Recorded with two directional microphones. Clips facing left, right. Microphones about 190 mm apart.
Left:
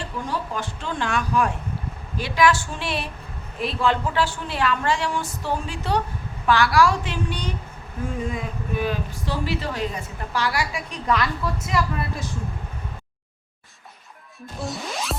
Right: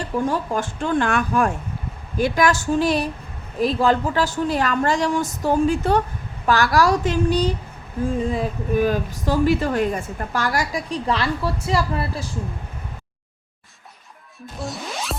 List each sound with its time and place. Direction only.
0.0 s a woman's voice: 45° right (ahead or behind)
14.6 s music: centre (ahead or behind)